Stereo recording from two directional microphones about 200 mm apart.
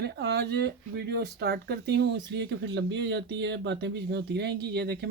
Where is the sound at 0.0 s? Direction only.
55° right (ahead or behind).